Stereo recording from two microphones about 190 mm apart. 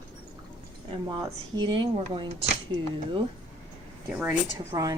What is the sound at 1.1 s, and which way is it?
A woman's voice, 20° right (ahead or behind).